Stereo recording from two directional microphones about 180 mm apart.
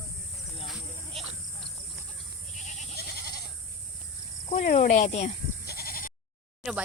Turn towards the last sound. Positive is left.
turn(degrees=-5)  # may be behind; listen again after turning